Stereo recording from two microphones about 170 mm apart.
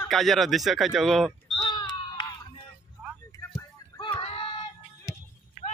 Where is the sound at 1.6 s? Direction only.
25° left (ahead or behind).